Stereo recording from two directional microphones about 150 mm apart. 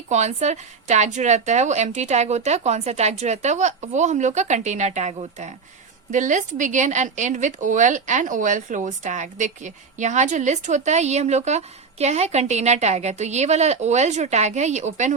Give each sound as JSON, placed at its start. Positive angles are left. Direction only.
{"t": 0.1, "sound": "a woman's voice", "side_deg": -50}